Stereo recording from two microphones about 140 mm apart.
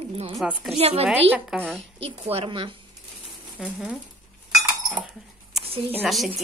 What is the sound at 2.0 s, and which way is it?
Speech, 45° right (ahead or behind).